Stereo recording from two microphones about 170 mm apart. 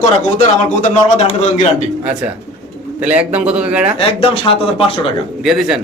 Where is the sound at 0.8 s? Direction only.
45° left (ahead or behind).